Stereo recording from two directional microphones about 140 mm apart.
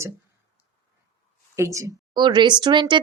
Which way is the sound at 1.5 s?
20° right (ahead or behind).